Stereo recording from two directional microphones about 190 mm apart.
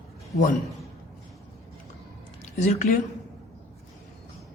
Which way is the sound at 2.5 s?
40° left (ahead or behind).